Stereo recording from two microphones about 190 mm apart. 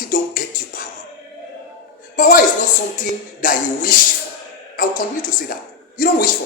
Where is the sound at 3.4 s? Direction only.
45° left (ahead or behind).